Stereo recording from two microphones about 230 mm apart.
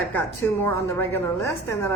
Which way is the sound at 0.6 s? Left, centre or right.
Centre.